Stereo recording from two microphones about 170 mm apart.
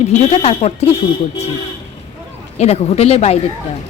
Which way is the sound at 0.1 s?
40° left (ahead or behind).